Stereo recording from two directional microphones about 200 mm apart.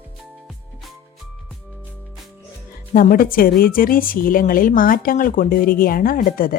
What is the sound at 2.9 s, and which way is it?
Speech, 45° left (ahead or behind).